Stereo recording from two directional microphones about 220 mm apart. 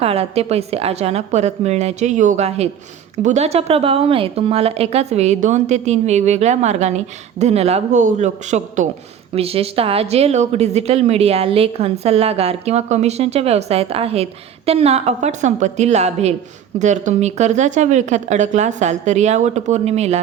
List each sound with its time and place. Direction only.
0.0 s a woman's voice: 25° right (ahead or behind)